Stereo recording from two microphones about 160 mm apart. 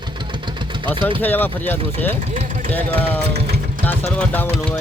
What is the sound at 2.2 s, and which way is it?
Vehicle, 45° right (ahead or behind).